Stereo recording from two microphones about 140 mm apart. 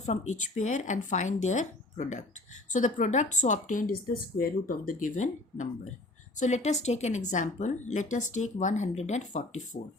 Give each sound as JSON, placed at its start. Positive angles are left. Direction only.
{"t": 0.0, "sound": "a woman's voice", "side_deg": 55}